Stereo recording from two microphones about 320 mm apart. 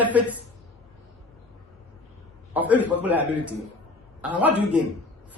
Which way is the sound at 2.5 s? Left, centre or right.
Centre.